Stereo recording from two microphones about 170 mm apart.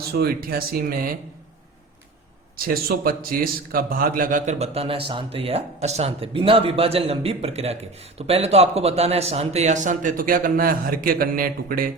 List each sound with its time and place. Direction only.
0.0 s speech: 65° right (ahead or behind)
2.6 s a man's voice: 65° right (ahead or behind)